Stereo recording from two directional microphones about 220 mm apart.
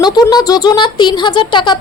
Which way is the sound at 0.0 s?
20° left (ahead or behind).